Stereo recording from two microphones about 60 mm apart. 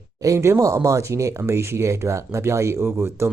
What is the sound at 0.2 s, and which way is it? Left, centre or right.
Speech, right.